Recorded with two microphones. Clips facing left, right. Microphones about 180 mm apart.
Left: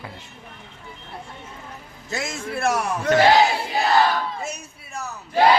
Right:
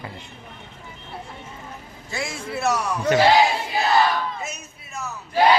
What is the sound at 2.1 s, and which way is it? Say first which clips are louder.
Speech: left 1 dB; 45° left (ahead or behind).